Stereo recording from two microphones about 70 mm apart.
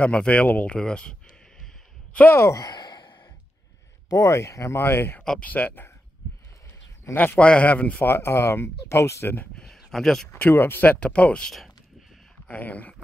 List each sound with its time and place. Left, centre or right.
0.0 s speech: centre
2.5 s sigh: left
4.1 s speech: left
7.2 s speech: left
9.8 s speech: centre
10.5 s speech: left